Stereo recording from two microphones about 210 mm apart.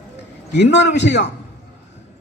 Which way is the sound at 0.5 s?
55° left (ahead or behind).